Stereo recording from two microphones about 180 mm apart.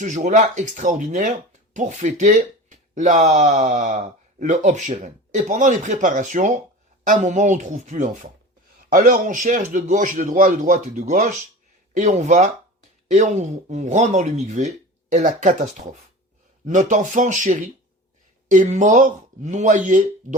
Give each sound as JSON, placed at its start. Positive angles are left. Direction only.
{"t": 0.0, "sound": "speech", "side_deg": -45}